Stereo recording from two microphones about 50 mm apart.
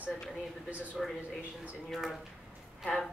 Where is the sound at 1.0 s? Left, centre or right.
Centre.